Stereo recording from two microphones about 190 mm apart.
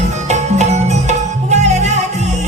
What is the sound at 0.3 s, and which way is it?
Music, 35° right (ahead or behind).